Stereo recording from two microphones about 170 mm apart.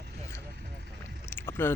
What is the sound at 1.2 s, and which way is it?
Vehicle, 15° left (ahead or behind).